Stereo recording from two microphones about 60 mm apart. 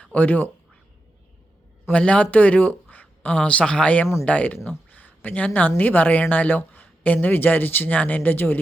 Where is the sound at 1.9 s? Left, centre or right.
Centre.